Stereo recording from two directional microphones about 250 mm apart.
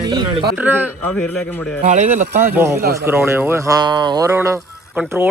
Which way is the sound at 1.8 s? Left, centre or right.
Right.